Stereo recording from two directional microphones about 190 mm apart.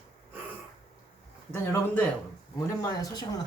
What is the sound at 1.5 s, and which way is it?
Speech, 10° left (ahead or behind).